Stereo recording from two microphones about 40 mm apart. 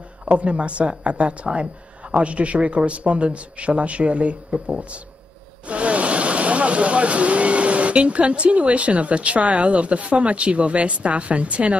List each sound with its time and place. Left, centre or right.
0.2 s speech: right